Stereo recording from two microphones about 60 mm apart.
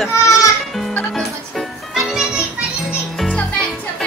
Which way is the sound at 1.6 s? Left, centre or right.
Centre.